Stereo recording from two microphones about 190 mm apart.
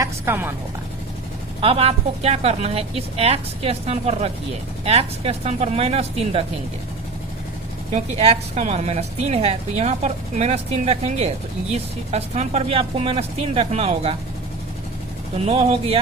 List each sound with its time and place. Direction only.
0.0 s a sound: 10° right (ahead or behind)
1.6 s a woman's voice: 30° right (ahead or behind)
7.9 s a woman's voice: 35° right (ahead or behind)
15.4 s a woman's voice: 35° right (ahead or behind)